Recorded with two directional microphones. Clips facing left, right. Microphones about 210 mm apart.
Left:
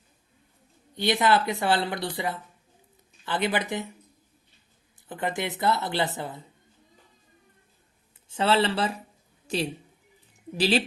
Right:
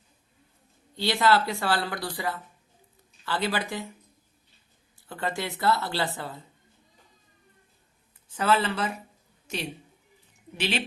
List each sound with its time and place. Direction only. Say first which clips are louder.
0.9 s speech: left 1 dB; 20° left (ahead or behind)
5.0 s speech: left 2 dB; 20° left (ahead or behind)
8.3 s a woman's voice: left 2 dB; 25° left (ahead or behind)